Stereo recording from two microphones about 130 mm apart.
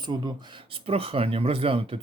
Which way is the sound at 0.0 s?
35° right (ahead or behind).